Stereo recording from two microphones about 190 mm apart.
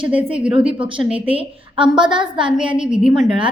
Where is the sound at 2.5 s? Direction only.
5° right (ahead or behind).